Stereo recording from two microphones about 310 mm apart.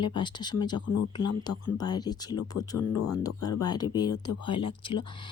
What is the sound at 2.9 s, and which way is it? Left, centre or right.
Speech, left.